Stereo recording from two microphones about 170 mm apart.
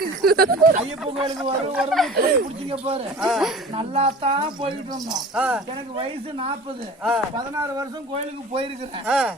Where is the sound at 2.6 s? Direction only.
35° right (ahead or behind).